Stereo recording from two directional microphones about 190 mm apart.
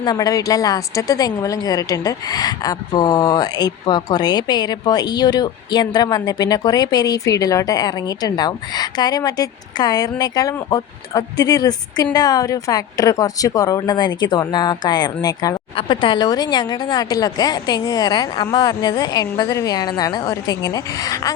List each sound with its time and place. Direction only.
0.0 s a woman's voice: 20° left (ahead or behind)